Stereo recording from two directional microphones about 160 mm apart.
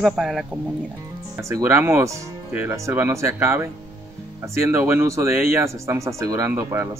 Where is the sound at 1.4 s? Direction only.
15° right (ahead or behind).